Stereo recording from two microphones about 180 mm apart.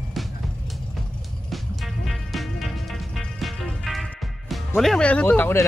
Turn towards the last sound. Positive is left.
turn(degrees=10)  # may be behind; listen again after turning